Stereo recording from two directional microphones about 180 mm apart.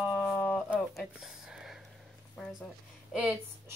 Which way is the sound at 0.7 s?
Centre (ahead or behind).